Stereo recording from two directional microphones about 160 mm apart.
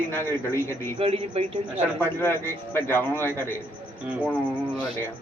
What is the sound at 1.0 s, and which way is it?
Speech, 40° right (ahead or behind).